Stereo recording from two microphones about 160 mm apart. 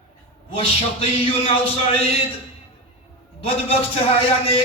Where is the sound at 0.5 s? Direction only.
35° left (ahead or behind).